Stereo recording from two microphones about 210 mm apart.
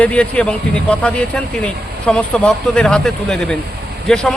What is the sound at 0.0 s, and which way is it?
A man's voice, 5° left (ahead or behind).